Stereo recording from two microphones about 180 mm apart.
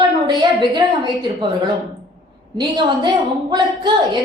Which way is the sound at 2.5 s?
25° right (ahead or behind).